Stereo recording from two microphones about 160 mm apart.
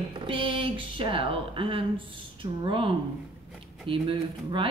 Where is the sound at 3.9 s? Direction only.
30° right (ahead or behind).